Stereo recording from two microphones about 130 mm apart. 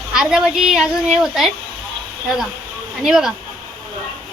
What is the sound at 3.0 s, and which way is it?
Speech, 5° right (ahead or behind).